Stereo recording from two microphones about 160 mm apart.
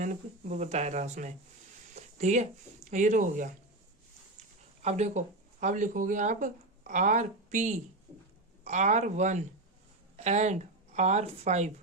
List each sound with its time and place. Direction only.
0.0 s speech: 50° right (ahead or behind)
2.0 s a sound: 45° right (ahead or behind)
2.9 s speech: 50° right (ahead or behind)
4.8 s speech: 45° right (ahead or behind)